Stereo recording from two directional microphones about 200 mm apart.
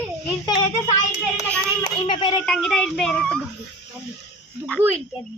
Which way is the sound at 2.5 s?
Centre (ahead or behind).